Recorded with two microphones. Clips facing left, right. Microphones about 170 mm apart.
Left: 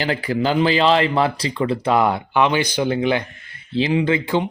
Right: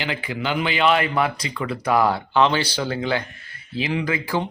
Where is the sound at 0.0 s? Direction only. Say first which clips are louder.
Left 6 dB; 40° left (ahead or behind).